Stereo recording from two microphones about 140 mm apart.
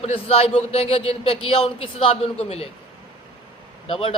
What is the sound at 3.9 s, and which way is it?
Speech, 40° left (ahead or behind).